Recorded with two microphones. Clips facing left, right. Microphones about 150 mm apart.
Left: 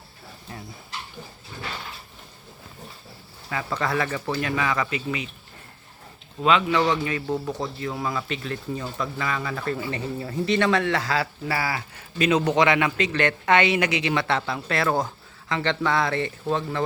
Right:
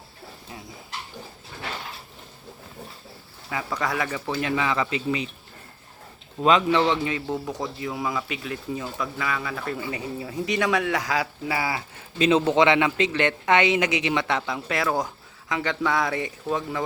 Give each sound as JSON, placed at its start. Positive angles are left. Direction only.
{"t": 3.5, "sound": "speech", "side_deg": -10}
{"t": 6.4, "sound": "speech", "side_deg": -35}